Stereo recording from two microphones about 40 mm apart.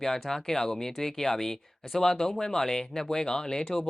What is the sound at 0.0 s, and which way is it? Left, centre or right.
Speech, centre.